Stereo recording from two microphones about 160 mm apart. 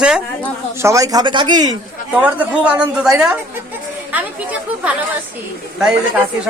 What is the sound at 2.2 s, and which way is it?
Speech, 10° right (ahead or behind).